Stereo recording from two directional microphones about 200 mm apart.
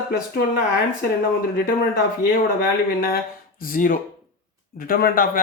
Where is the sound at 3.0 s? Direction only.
45° left (ahead or behind).